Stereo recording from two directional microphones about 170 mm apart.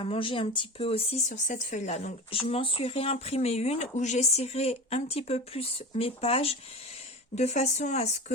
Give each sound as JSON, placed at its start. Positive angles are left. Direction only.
{"t": 0.0, "sound": "speech", "side_deg": 30}